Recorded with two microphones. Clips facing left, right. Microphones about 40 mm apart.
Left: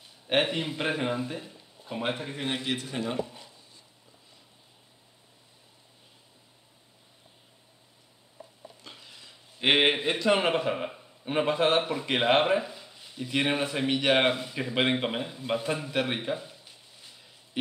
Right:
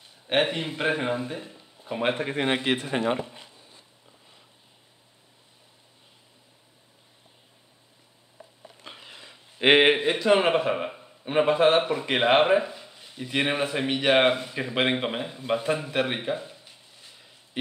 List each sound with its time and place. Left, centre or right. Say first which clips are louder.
0.0 s speech: right 2 dB; centre
2.0 s speech: right 6 dB; right
8.8 s a sound: right 8 dB; right
9.8 s a man's voice: right 4 dB; centre